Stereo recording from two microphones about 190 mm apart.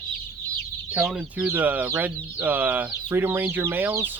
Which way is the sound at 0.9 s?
5° right (ahead or behind).